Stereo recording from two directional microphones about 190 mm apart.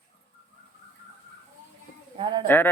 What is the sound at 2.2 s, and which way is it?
Speech, 25° right (ahead or behind).